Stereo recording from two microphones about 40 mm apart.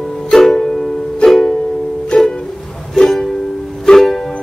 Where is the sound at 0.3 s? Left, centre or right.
Centre.